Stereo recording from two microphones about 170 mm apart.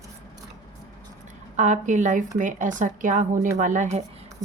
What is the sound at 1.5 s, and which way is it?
A woman's voice, 45° right (ahead or behind).